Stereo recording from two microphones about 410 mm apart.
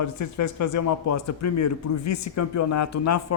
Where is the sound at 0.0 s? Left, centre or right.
Left.